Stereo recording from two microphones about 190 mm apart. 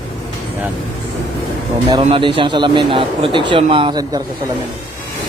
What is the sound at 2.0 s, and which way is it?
A man's voice, 25° right (ahead or behind).